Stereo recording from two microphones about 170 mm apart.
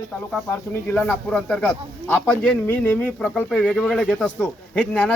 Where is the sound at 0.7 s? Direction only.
15° left (ahead or behind).